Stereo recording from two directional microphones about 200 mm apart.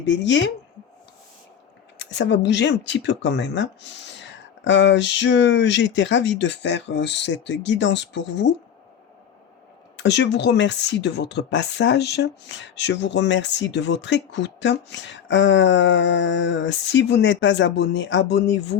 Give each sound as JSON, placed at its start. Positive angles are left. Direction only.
{"t": 0.0, "sound": "speech", "side_deg": 60}
{"t": 2.0, "sound": "speech", "side_deg": 60}
{"t": 10.0, "sound": "speech", "side_deg": 60}